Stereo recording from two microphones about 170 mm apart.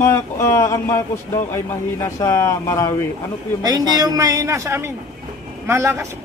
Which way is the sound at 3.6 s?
20° right (ahead or behind).